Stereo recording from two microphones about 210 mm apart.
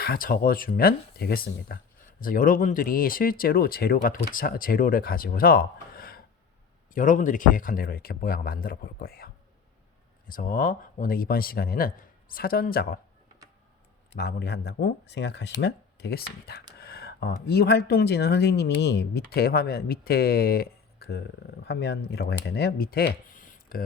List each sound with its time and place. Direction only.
0.0 s speech: 45° left (ahead or behind)
14.2 s speech: 50° left (ahead or behind)